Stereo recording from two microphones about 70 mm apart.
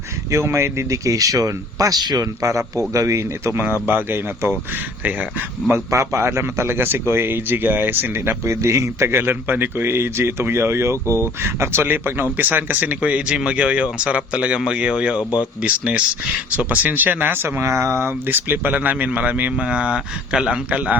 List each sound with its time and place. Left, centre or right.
0.3 s speech: right
2.4 s a man's voice: right
5.7 s a man's voice: right
9.1 s a man's voice: right
11.0 s speech: left
11.4 s speech: right; by 20.9 s centre